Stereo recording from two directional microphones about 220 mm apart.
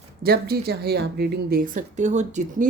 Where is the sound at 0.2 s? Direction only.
45° right (ahead or behind).